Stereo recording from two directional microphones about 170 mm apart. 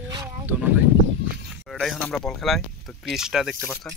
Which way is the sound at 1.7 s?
Centre (ahead or behind).